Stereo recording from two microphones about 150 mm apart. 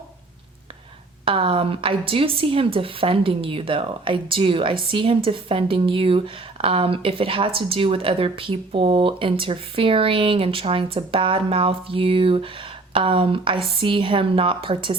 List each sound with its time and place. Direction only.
1.2 s a woman's voice: 35° right (ahead or behind)